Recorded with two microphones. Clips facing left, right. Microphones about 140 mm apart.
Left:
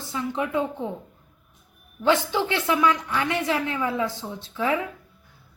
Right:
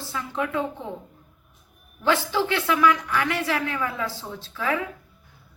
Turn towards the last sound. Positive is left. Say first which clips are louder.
# left 2 dB
turn(degrees=20)  # may be behind; listen again after turning